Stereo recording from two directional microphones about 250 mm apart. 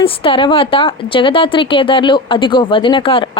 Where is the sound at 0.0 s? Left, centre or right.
Left.